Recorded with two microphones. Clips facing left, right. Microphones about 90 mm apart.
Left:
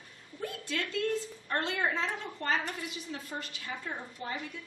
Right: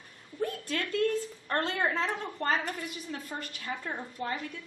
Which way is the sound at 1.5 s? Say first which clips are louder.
Right 2 dB; 45° right (ahead or behind).